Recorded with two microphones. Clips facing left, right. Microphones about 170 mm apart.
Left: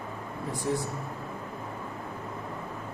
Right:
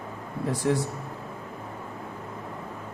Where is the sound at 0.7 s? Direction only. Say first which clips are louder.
Right 4 dB; 80° right.